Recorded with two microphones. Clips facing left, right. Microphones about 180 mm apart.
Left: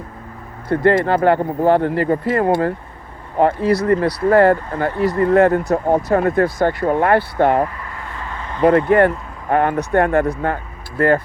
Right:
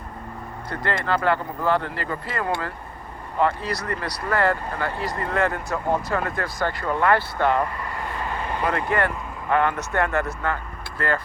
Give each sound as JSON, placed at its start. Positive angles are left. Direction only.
{"t": 0.7, "sound": "speech", "side_deg": 55}